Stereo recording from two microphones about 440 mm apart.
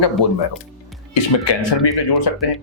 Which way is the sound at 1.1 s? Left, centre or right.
Left.